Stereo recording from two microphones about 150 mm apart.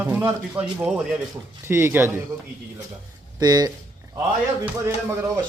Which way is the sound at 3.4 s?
25° right (ahead or behind).